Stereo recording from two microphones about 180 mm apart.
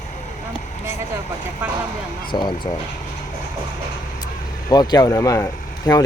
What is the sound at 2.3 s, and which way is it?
Speech, 25° left (ahead or behind).